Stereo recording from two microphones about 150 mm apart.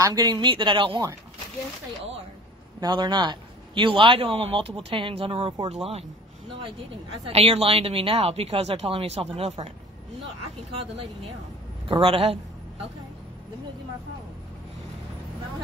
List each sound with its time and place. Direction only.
0.0 s speech: 25° right (ahead or behind)
2.8 s a man's voice: 30° right (ahead or behind)
7.2 s a man's voice: 40° right (ahead or behind)
12.0 s a man's voice: 40° right (ahead or behind)